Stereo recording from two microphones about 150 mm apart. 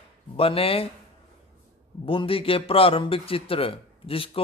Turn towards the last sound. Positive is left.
turn(degrees=40)  # may be behind; listen again after turning